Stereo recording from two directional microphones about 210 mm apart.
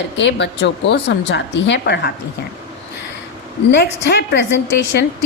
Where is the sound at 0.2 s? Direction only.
60° left (ahead or behind).